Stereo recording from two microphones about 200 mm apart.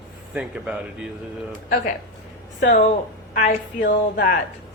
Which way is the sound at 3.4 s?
40° left (ahead or behind).